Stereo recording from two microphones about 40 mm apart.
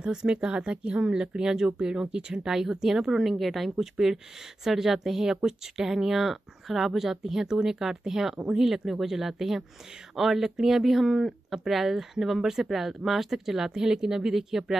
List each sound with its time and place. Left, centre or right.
0.0 s speech: centre
2.5 s speech: centre
3.3 s speech: centre
13.7 s speech: centre
14.3 s speech: centre